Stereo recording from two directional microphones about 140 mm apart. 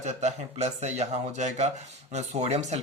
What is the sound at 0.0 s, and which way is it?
A man's voice, 55° right (ahead or behind).